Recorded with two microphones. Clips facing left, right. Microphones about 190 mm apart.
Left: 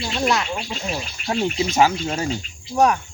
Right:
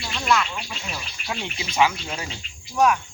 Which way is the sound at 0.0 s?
30° left (ahead or behind).